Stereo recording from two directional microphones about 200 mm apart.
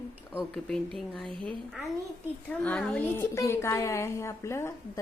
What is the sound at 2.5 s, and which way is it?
A woman's voice, 5° left (ahead or behind).